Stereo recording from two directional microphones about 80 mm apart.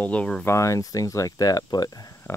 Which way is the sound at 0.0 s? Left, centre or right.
Centre.